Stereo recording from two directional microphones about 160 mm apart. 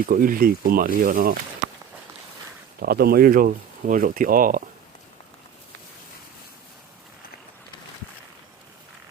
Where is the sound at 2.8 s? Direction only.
70° right (ahead or behind).